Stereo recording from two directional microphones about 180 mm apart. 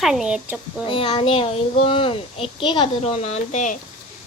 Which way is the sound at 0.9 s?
30° left (ahead or behind).